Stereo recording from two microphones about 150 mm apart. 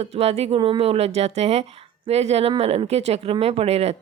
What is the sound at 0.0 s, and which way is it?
Speech, 45° right (ahead or behind).